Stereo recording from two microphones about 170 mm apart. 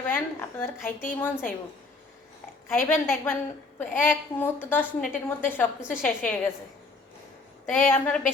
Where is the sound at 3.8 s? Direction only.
10° left (ahead or behind).